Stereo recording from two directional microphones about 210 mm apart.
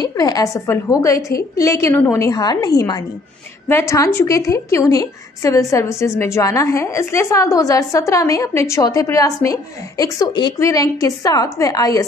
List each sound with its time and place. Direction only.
0.0 s a woman's voice: 15° left (ahead or behind)